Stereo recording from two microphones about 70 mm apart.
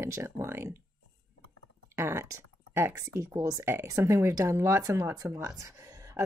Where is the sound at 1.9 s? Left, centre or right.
Right.